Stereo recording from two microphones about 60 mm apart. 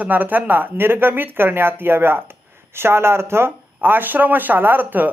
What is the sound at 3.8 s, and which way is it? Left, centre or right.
Speech, right.